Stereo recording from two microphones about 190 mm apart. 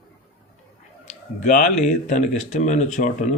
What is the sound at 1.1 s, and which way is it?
Speech, 40° left (ahead or behind).